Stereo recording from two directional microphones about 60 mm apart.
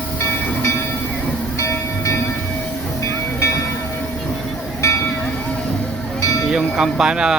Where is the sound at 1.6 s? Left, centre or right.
Left.